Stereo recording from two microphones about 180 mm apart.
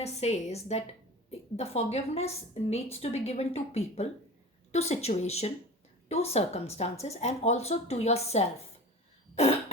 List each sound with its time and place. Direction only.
0.0 s a woman's voice: 35° left (ahead or behind)
9.3 s cough: 35° left (ahead or behind)